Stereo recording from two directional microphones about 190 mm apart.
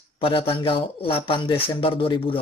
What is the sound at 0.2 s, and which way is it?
A man's voice, 30° left (ahead or behind).